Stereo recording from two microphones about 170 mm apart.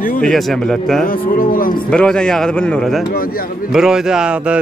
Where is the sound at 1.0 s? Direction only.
55° left (ahead or behind).